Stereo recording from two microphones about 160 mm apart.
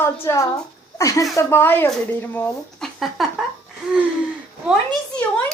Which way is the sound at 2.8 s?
Centre (ahead or behind).